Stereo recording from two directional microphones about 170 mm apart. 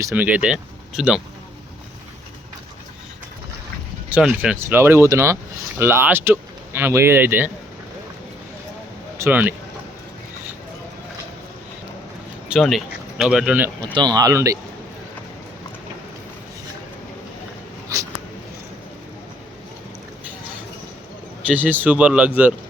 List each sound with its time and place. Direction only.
0.0 s speech: 10° right (ahead or behind)
4.1 s speech: 5° right (ahead or behind)
9.1 s speech: 10° right (ahead or behind)
12.5 s speech: centre (ahead or behind)
13.9 s speech: 25° right (ahead or behind)
21.4 s speech: 10° right (ahead or behind)